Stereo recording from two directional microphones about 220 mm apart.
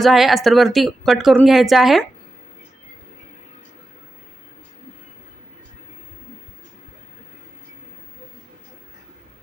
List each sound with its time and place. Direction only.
0.0 s a woman's voice: centre (ahead or behind)